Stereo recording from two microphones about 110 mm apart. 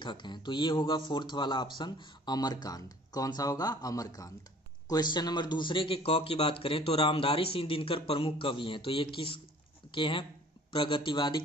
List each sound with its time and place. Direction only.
0.0 s a man's voice: 45° left (ahead or behind)